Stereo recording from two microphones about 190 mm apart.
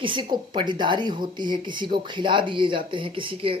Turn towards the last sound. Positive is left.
turn(degrees=-30)  # may be behind; listen again after turning